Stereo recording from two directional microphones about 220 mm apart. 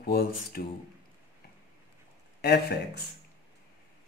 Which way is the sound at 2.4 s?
50° left (ahead or behind).